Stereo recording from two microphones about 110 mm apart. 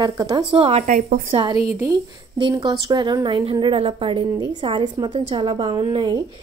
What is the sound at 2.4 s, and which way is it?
A woman's voice, 45° right (ahead or behind).